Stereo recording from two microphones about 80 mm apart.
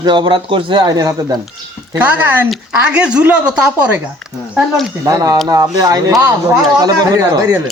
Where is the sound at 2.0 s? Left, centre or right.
Right.